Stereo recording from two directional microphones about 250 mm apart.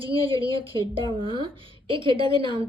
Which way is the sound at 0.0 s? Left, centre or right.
Right.